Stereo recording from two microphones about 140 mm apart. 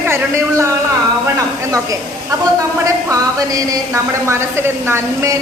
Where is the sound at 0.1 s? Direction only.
20° right (ahead or behind).